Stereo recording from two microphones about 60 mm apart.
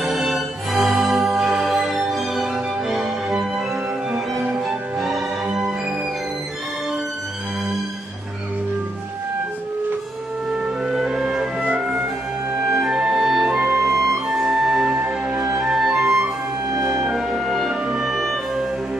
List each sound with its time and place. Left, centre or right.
0.0 s music: centre
4.1 s music: centre
4.6 s music: centre
10.9 s music: centre
12.6 s music: centre
14.3 s music: centre